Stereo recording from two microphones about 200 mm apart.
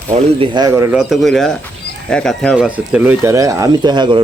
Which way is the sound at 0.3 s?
25° right (ahead or behind).